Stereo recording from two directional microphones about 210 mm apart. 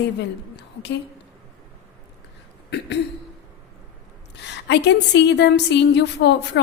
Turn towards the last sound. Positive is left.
turn(degrees=55)  # may be behind; listen again after turning